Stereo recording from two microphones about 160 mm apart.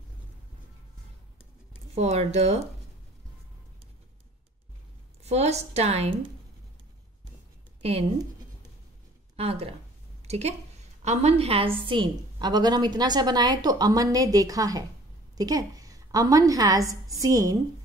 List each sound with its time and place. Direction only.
2.0 s speech: 40° right (ahead or behind)
5.2 s a woman's voice: 45° right (ahead or behind)
9.4 s a woman's voice: 40° right (ahead or behind); by 17.6 s 20° right (ahead or behind)